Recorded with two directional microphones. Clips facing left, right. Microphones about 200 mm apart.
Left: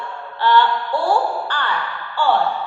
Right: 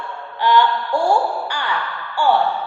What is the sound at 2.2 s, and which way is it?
Speech, 10° right (ahead or behind).